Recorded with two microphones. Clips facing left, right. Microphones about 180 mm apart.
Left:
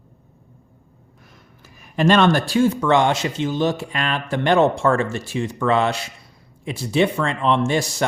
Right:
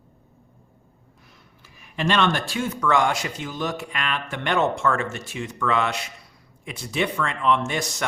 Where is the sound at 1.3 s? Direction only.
45° left (ahead or behind).